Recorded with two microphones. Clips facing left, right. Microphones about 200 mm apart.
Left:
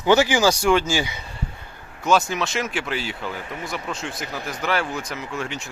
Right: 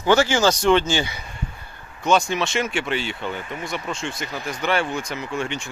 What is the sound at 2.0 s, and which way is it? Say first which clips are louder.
Speech: right 1 dB; 5° left (ahead or behind).